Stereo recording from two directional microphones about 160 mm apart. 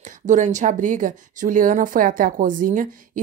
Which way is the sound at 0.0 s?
50° right (ahead or behind).